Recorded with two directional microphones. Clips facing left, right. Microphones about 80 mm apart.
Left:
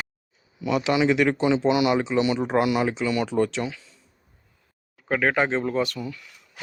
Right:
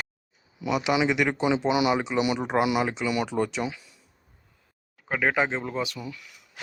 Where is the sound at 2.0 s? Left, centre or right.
Centre.